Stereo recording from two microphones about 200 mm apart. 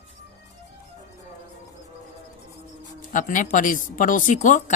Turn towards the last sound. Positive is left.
turn(degrees=40)  # may be behind; listen again after turning